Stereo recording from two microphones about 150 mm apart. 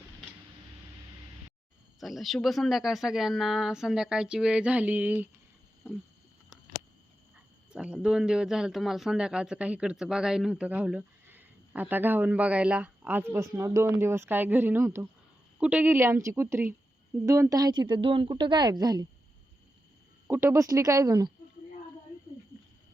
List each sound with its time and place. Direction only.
2.0 s speech: centre (ahead or behind)
5.8 s a sound: 10° right (ahead or behind)
7.3 s speech: 5° right (ahead or behind); by 19.0 s 25° right (ahead or behind)
20.2 s speech: 20° right (ahead or behind)